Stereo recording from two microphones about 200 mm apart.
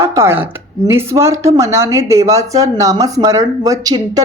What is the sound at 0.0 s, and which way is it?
A woman's voice, 15° right (ahead or behind).